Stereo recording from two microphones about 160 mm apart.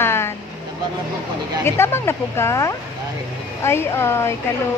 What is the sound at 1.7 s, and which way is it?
A woman's voice, 15° left (ahead or behind).